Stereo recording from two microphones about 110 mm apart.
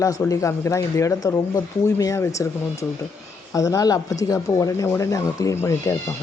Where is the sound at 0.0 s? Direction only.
30° left (ahead or behind).